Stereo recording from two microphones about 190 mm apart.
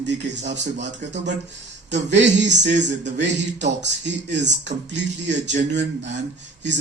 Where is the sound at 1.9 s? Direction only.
70° right (ahead or behind).